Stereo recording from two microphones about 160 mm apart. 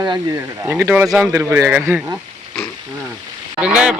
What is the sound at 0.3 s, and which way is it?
Speech, 15° right (ahead or behind).